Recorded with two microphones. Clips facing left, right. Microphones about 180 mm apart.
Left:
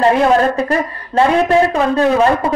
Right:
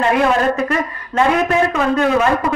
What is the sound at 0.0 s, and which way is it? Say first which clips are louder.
A woman's voice: left 3 dB; 35° left (ahead or behind).